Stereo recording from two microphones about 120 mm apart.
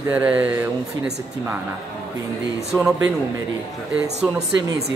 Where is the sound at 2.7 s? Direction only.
5° right (ahead or behind).